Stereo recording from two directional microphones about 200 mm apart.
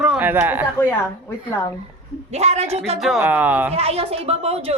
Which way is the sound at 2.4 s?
30° right (ahead or behind).